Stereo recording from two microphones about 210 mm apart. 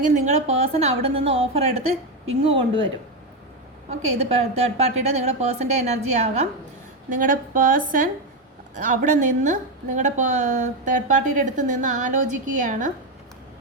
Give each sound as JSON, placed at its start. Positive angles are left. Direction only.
{"t": 0.0, "sound": "a woman's voice", "side_deg": -35}
{"t": 3.8, "sound": "a woman's voice", "side_deg": -30}